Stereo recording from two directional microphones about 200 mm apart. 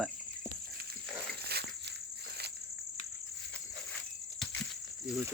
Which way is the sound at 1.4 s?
55° right (ahead or behind).